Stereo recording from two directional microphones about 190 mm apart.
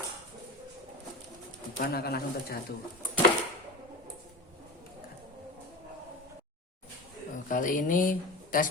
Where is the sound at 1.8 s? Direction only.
55° left (ahead or behind).